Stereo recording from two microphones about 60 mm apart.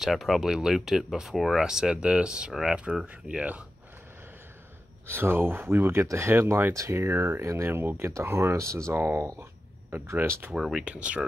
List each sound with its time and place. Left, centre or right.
0.0 s speech: centre; by 3.6 s right
5.0 s speech: right
9.4 s a sound: right
10.2 s speech: right
10.5 s speech: centre
10.8 s speech: centre